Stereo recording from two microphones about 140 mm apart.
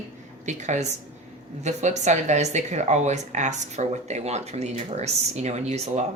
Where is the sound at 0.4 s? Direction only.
55° right (ahead or behind).